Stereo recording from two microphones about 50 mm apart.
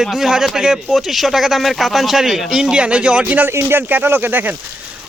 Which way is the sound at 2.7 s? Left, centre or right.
Right.